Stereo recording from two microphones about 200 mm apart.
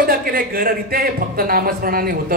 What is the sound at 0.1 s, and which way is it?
A man's voice, 45° right (ahead or behind).